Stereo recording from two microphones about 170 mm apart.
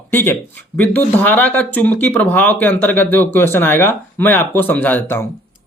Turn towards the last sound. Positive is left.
turn(degrees=15)  # may be behind; listen again after turning